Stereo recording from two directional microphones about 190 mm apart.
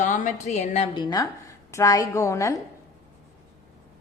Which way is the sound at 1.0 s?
20° left (ahead or behind).